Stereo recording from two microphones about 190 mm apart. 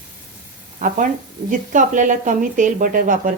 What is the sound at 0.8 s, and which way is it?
Speech, 50° right (ahead or behind).